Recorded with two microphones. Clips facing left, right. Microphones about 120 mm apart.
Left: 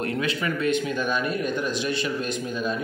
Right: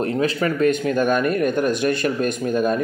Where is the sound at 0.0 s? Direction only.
40° right (ahead or behind).